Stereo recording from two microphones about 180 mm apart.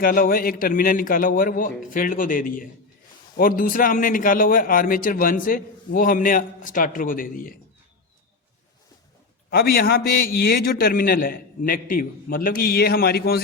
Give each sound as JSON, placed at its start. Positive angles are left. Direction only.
{"t": 0.0, "sound": "a man's voice", "side_deg": 55}
{"t": 9.5, "sound": "a man's voice", "side_deg": 55}